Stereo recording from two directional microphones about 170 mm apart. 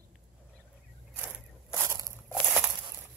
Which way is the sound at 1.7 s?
15° right (ahead or behind).